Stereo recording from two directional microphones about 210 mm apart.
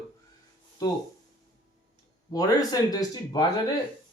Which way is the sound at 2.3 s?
15° left (ahead or behind).